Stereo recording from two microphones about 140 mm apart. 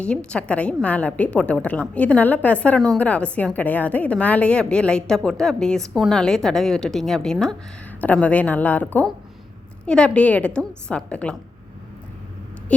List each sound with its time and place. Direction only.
0.0 s a woman's voice: 5° left (ahead or behind)